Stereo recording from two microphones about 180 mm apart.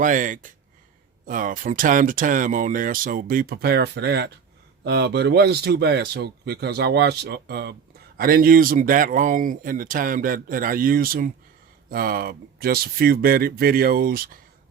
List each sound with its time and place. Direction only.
0.0 s speech: 45° right (ahead or behind)